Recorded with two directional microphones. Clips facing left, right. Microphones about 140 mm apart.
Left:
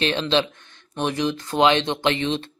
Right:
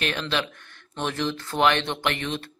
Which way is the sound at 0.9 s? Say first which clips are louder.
Left 4 dB; 15° left (ahead or behind).